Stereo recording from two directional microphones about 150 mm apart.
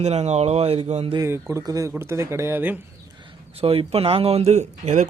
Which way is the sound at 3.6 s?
40° right (ahead or behind).